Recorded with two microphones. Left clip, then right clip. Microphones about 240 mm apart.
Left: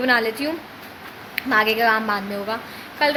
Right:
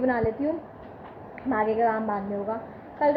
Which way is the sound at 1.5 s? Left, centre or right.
Left.